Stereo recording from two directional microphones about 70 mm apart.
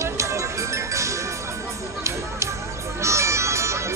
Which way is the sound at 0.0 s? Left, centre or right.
Right.